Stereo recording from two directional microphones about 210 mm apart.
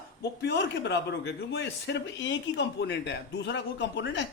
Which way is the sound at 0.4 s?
55° left (ahead or behind).